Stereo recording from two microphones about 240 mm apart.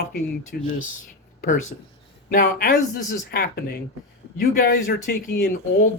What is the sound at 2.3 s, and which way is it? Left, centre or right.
Speech, left.